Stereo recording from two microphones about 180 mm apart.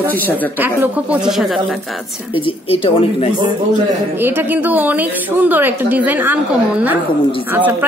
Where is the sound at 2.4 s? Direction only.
30° left (ahead or behind).